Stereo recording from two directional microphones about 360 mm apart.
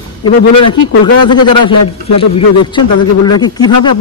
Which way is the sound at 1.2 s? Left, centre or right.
Centre.